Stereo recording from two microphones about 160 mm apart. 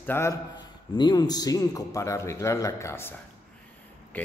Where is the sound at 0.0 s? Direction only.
15° left (ahead or behind).